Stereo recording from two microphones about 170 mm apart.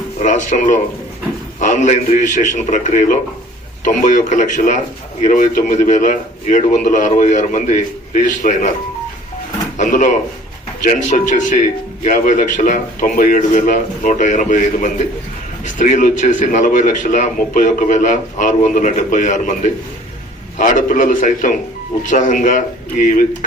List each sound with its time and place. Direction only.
0.2 s a man's voice: 45° left (ahead or behind)
9.7 s a man's voice: 50° left (ahead or behind)